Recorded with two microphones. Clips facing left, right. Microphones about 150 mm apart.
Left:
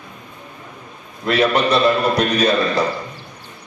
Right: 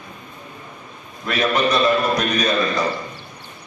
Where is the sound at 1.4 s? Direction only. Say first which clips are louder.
Left 2 dB; 30° left (ahead or behind).